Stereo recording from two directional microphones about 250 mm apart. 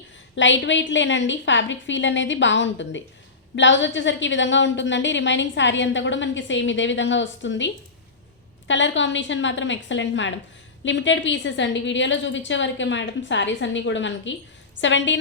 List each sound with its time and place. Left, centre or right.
0.3 s a woman's voice: left